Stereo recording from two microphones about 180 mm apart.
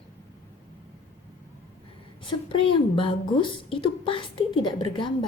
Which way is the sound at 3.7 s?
30° left (ahead or behind).